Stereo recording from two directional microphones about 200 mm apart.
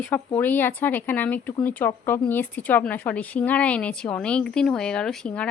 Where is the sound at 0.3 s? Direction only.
10° left (ahead or behind).